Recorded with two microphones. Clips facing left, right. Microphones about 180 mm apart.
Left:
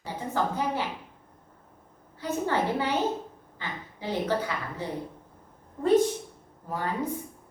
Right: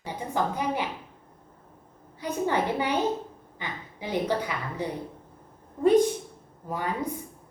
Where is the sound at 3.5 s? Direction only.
15° right (ahead or behind).